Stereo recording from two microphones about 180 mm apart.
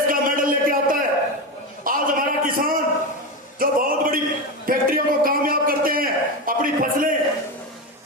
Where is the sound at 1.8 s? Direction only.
50° right (ahead or behind).